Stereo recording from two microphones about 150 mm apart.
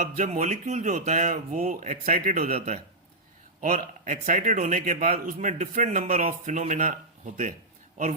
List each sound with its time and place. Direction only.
0.0 s a man's voice: 55° right (ahead or behind)
2.5 s speech: 45° right (ahead or behind)
3.6 s a man's voice: 60° right (ahead or behind)